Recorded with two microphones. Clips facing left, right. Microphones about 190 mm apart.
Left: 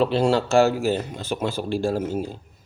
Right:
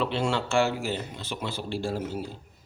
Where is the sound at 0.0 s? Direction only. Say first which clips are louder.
Left 7 dB; 40° left (ahead or behind).